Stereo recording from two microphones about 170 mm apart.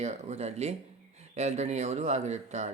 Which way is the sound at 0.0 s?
45° right (ahead or behind).